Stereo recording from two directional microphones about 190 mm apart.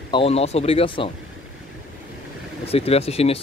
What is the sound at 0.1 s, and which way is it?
Speech, 30° left (ahead or behind).